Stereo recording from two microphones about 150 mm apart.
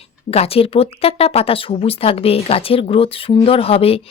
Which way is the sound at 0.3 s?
40° left (ahead or behind).